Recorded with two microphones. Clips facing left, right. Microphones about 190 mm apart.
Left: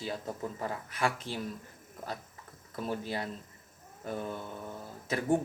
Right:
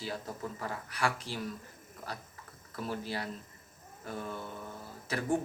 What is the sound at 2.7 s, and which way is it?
Speech, 20° left (ahead or behind).